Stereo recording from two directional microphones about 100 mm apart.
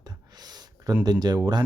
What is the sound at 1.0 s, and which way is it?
Speech, 40° right (ahead or behind).